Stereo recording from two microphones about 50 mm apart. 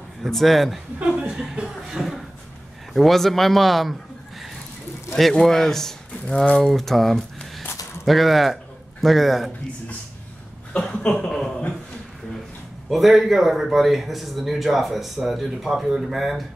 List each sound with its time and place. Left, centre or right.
0.2 s speech: centre
1.3 s speech: centre
5.1 s speech: centre
6.2 s speech: left
6.6 s speech: centre
10.7 s speech: centre
11.2 s speech: centre
12.9 s speech: centre